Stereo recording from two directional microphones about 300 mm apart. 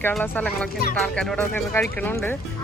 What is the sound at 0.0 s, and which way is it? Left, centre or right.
Speech, centre.